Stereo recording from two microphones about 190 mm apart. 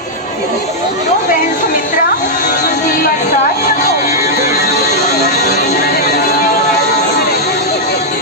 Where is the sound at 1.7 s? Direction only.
45° left (ahead or behind).